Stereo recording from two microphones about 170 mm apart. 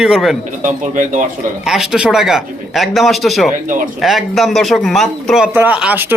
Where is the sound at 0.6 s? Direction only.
45° right (ahead or behind).